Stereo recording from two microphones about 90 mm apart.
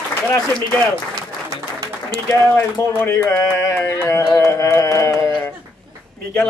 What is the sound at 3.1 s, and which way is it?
Speech, 35° left (ahead or behind).